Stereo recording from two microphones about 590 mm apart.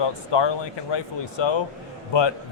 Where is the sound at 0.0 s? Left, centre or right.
Left.